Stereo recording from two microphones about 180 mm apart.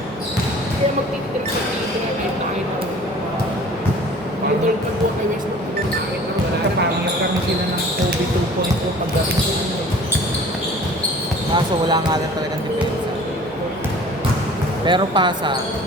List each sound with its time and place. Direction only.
11.5 s speech: 25° right (ahead or behind)
14.8 s speech: 25° right (ahead or behind)